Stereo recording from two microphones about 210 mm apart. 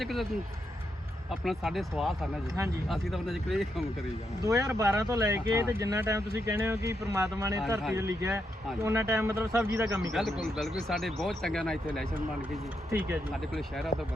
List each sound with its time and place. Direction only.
0.0 s speech: centre (ahead or behind)
1.3 s speech: centre (ahead or behind)
4.4 s speech: 15° right (ahead or behind)
10.1 s speech: centre (ahead or behind)
12.9 s speech: 10° right (ahead or behind)
13.5 s speech: centre (ahead or behind)